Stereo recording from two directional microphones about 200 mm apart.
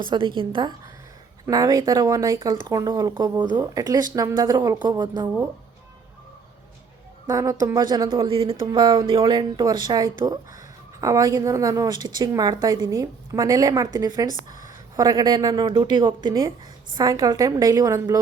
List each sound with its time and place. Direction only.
0.0 s speech: 25° right (ahead or behind)
7.3 s a woman's voice: 15° right (ahead or behind)